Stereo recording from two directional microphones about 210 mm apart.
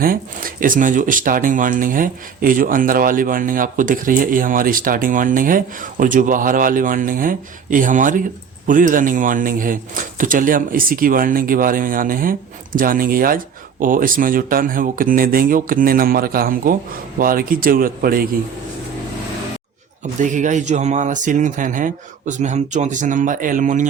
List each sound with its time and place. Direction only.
0.0 s speech: 40° right (ahead or behind)
20.2 s speech: 35° right (ahead or behind)